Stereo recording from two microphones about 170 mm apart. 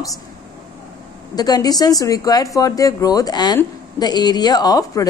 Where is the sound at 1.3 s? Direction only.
20° left (ahead or behind).